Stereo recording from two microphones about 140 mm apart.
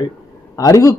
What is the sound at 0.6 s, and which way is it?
Speech, 25° left (ahead or behind).